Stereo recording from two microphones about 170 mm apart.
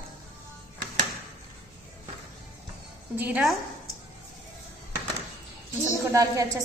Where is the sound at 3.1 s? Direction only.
10° right (ahead or behind).